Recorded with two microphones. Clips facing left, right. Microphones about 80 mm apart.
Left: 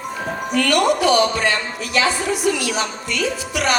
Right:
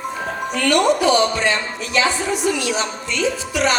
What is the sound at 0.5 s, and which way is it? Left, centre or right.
Speech, right.